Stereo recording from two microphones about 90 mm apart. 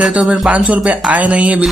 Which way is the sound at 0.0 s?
10° right (ahead or behind).